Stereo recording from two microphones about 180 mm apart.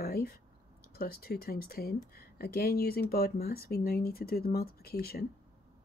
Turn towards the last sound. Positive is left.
turn(degrees=60)  # may be behind; listen again after turning